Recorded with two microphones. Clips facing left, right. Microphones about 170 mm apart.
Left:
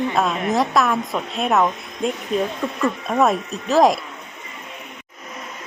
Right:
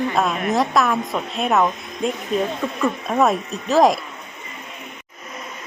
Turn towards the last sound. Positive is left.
turn(degrees=0)  # may be behind; listen again after turning